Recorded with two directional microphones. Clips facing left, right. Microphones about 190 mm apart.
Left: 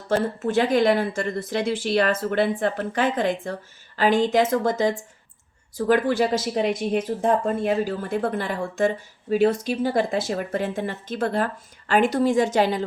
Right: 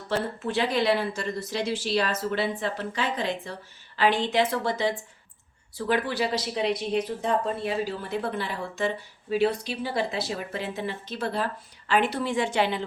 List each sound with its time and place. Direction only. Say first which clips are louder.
0.1 s speech: left 6 dB; 45° left (ahead or behind)